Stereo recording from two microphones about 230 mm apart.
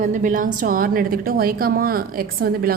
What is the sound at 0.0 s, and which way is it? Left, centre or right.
A woman's voice, right.